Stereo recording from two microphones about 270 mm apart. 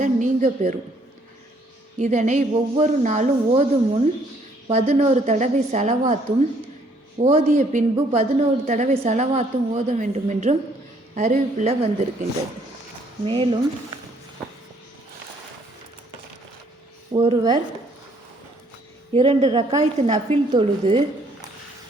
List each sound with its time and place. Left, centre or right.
0.0 s a woman's voice: right
2.0 s a woman's voice: right
7.2 s a woman's voice: right
13.2 s a woman's voice: centre
17.1 s speech: centre
19.1 s a woman's voice: right